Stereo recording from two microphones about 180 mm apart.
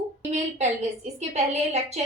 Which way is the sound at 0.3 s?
40° right (ahead or behind).